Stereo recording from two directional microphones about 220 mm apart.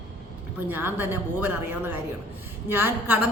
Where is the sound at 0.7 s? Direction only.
10° right (ahead or behind).